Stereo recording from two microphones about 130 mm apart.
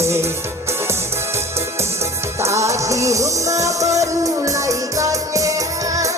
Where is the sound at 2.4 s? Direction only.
20° right (ahead or behind).